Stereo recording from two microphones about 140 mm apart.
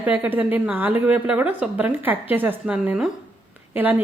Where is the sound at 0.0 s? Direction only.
10° right (ahead or behind).